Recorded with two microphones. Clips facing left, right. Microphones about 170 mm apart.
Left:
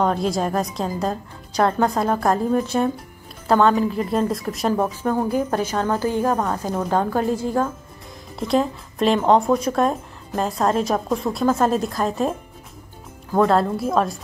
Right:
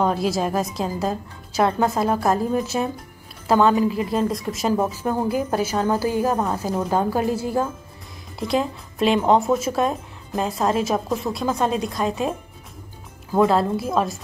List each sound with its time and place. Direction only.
0.0 s a woman's voice: 5° right (ahead or behind)